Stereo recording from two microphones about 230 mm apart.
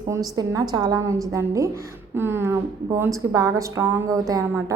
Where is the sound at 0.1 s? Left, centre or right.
Centre.